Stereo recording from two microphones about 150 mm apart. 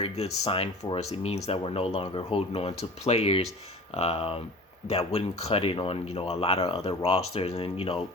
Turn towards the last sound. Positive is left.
turn(degrees=40)  # may be behind; listen again after turning